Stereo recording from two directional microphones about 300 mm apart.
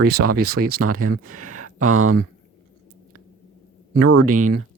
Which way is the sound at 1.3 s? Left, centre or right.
Right.